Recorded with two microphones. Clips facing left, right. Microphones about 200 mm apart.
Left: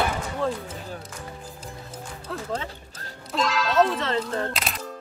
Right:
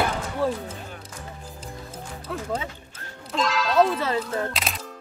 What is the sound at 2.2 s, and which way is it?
Music, 10° right (ahead or behind).